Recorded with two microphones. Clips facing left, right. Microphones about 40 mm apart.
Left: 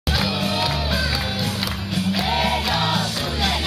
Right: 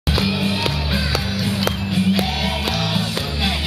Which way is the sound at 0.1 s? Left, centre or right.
Centre.